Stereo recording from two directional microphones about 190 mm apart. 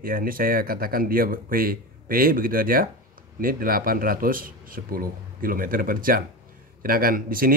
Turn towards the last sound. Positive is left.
turn(degrees=-50)  # may be behind; listen again after turning